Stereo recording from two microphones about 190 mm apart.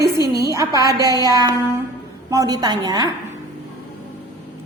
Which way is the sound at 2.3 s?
20° right (ahead or behind).